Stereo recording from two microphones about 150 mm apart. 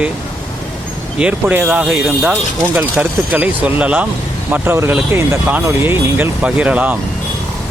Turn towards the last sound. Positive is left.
turn(degrees=-10)  # may be behind; listen again after turning